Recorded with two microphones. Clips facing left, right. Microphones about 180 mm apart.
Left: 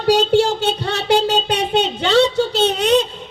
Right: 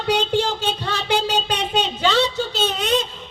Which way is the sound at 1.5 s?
65° left (ahead or behind).